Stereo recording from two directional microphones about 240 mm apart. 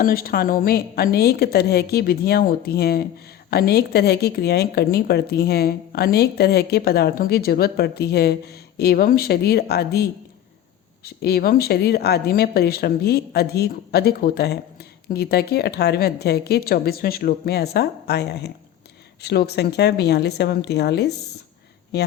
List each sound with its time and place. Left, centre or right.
0.0 s speech: left